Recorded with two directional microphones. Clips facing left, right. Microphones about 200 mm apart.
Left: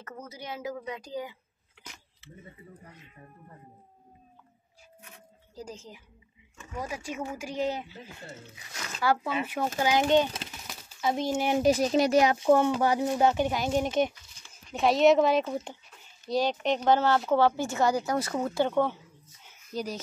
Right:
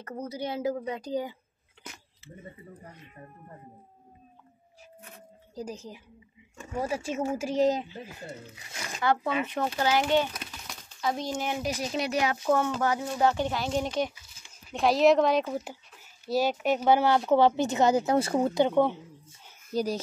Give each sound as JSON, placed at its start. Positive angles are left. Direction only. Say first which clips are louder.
{"t": 0.0, "sound": "a woman's voice", "louder": "right 8 dB", "side_deg": -35}
{"t": 6.6, "sound": "a woman's voice", "louder": "right 5 dB", "side_deg": -35}
{"t": 7.9, "sound": "speech", "louder": "right 4 dB", "side_deg": -15}
{"t": 9.0, "sound": "a child's voice", "louder": "right 1 dB", "side_deg": 5}
{"t": 10.7, "sound": "a sound", "louder": "left 1 dB", "side_deg": 5}
{"t": 11.1, "sound": "speech", "louder": "left 4 dB", "side_deg": 5}
{"t": 11.7, "sound": "speech", "louder": "left 7 dB", "side_deg": 40}
{"t": 12.3, "sound": "a child's voice", "louder": "left 4 dB", "side_deg": 15}
{"t": 14.7, "sound": "a child's voice", "louder": "even", "side_deg": 0}
{"t": 18.6, "sound": "speech", "louder": "right 2 dB", "side_deg": -15}
{"t": 19.7, "sound": "a woman's voice", "louder": "right 5 dB", "side_deg": -35}